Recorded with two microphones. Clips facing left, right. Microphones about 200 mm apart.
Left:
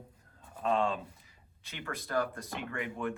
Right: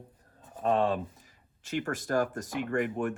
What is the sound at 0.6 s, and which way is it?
Speech, 40° right (ahead or behind).